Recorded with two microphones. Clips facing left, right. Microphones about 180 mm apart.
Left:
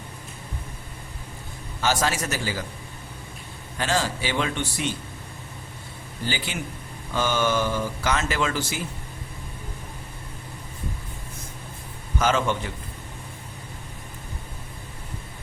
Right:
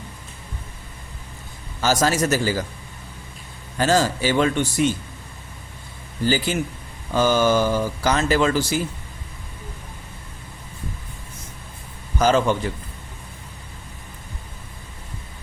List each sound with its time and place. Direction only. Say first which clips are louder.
1.8 s speech: right 5 dB; 40° right (ahead or behind)
3.8 s a man's voice: right 7 dB; 40° right (ahead or behind)
6.2 s speech: right 9 dB; 40° right (ahead or behind)
12.2 s speech: right 5 dB; 35° right (ahead or behind)